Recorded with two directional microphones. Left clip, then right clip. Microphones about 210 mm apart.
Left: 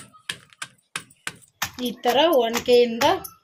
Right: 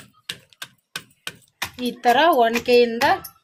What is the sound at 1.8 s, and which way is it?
Speech, 55° right (ahead or behind).